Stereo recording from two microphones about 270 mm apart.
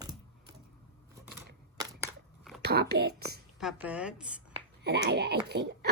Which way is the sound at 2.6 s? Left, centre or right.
Right.